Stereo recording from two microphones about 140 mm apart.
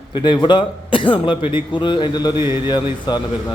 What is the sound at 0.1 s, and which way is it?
A man's voice, 35° left (ahead or behind).